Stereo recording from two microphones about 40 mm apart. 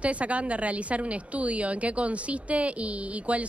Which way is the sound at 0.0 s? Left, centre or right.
Right.